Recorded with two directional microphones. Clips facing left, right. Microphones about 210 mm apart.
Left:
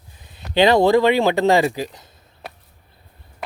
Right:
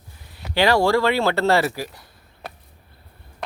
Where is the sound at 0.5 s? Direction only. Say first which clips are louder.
Left 4 dB; 20° left (ahead or behind).